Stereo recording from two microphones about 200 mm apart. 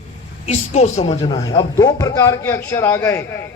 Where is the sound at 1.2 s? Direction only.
20° left (ahead or behind).